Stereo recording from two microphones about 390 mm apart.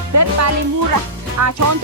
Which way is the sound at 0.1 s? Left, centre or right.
Right.